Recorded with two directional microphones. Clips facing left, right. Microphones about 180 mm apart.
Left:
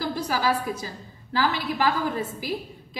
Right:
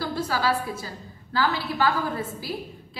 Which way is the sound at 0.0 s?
15° left (ahead or behind).